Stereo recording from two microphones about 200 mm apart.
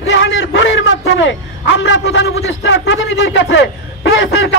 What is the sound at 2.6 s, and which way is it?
A man's voice, 65° left (ahead or behind).